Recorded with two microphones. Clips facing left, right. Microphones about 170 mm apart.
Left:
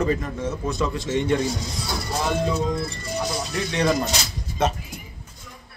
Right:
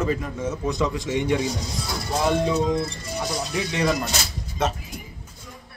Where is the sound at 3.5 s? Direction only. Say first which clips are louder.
Left 1 dB; 5° right (ahead or behind).